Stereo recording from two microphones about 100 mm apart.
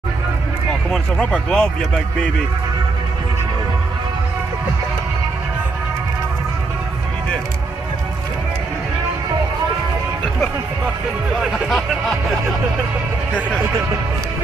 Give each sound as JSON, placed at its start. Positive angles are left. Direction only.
{"t": 0.9, "sound": "speech", "side_deg": 5}
{"t": 11.4, "sound": "speech", "side_deg": 0}